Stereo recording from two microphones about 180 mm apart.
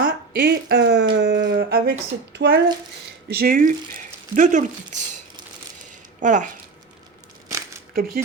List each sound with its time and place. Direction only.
0.0 s a woman's voice: 65° right (ahead or behind); by 5.0 s 45° right (ahead or behind)
6.2 s speech: 45° right (ahead or behind)
7.9 s speech: 55° right (ahead or behind)